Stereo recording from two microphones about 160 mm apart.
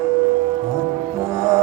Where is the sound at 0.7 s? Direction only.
15° right (ahead or behind).